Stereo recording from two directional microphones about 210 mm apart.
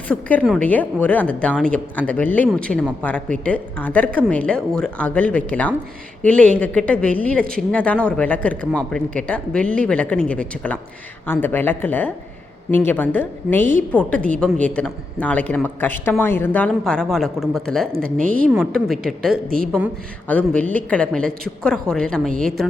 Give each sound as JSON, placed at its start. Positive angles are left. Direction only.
{"t": 0.1, "sound": "speech", "side_deg": 5}
{"t": 18.2, "sound": "a woman's voice", "side_deg": -40}
{"t": 18.6, "sound": "speech", "side_deg": 0}